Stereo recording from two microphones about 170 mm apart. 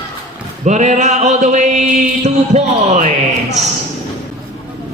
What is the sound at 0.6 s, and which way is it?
Mantra, 45° right (ahead or behind).